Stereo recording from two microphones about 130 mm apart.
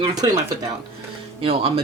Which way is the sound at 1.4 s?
45° right (ahead or behind).